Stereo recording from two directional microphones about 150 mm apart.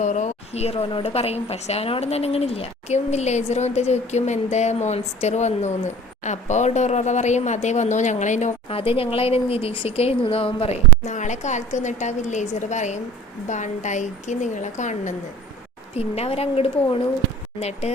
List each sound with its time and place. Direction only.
0.0 s speech: 50° left (ahead or behind)
16.0 s a woman's voice: 40° left (ahead or behind)